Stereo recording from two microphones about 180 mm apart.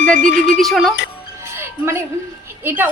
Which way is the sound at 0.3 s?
75° left (ahead or behind).